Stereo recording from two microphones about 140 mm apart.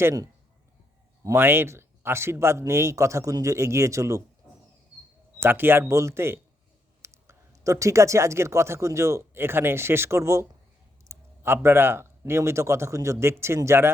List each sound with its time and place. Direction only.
0.0 s speech: 25° right (ahead or behind)
5.4 s speech: 15° right (ahead or behind)